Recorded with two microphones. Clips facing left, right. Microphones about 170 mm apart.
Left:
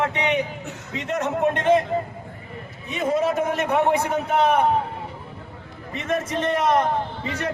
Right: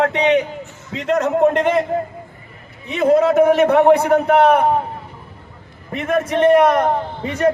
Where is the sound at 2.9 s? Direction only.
70° right (ahead or behind).